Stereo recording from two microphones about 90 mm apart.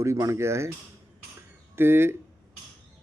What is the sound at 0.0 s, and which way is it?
Speech, 35° right (ahead or behind).